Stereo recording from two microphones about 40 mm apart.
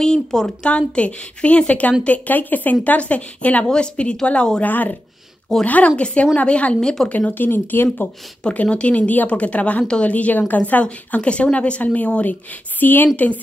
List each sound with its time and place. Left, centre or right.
0.0 s speech: centre
0.7 s speech: left
3.6 s speech: left
4.6 s speech: left
5.5 s speech: centre
5.9 s speech: left
7.1 s speech: left
8.5 s speech: left
12.8 s speech: left
13.1 s speech: left